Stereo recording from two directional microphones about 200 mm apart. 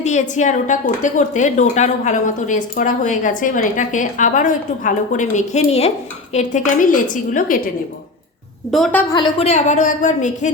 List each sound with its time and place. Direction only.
0.0 s a woman's voice: 35° left (ahead or behind)
8.7 s a woman's voice: 5° left (ahead or behind)
9.1 s a woman's voice: 20° left (ahead or behind)
9.5 s a woman's voice: 35° left (ahead or behind)